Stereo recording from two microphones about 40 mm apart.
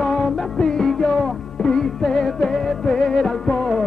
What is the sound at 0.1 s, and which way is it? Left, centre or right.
Music, centre.